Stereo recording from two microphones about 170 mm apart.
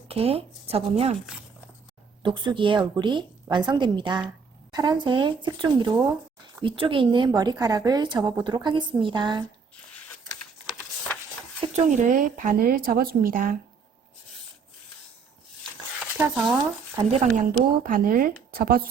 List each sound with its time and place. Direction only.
0.1 s speech: 35° right (ahead or behind)
2.2 s a woman's voice: 30° right (ahead or behind)
10.7 s a sound: 5° left (ahead or behind)
11.6 s speech: 45° right (ahead or behind)
16.0 s a sound: 5° right (ahead or behind)
17.0 s speech: 40° right (ahead or behind)
17.8 s speech: 55° right (ahead or behind)